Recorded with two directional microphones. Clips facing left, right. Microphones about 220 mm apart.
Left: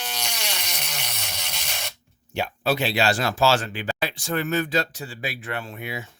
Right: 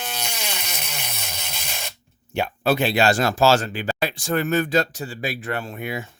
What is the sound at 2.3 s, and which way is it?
Speech, 55° right (ahead or behind).